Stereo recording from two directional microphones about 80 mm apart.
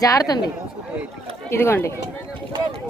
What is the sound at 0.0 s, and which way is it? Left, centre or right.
Speech, left.